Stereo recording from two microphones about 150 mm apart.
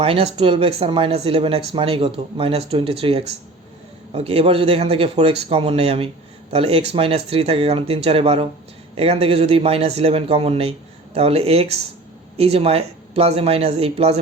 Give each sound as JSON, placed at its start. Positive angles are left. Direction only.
{"t": 0.0, "sound": "speech", "side_deg": -40}